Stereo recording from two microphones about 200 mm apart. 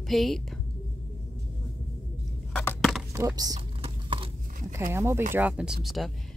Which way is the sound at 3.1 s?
15° right (ahead or behind).